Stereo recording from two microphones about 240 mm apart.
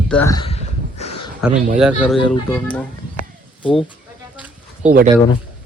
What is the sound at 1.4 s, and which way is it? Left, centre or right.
Speech, centre.